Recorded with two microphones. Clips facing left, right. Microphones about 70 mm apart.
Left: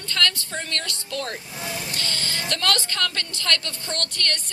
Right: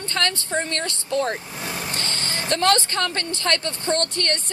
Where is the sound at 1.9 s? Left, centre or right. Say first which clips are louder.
Right 1 dB; right.